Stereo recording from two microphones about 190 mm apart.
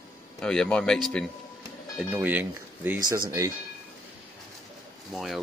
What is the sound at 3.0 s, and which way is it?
Speech, 20° right (ahead or behind).